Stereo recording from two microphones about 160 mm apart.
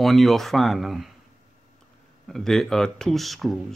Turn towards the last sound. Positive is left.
turn(degrees=0)  # may be behind; listen again after turning